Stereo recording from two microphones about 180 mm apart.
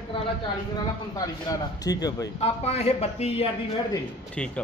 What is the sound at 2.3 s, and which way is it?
A man's voice, 35° left (ahead or behind).